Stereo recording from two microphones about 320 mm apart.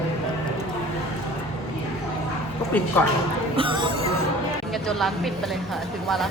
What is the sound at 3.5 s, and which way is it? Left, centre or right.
Speech, centre.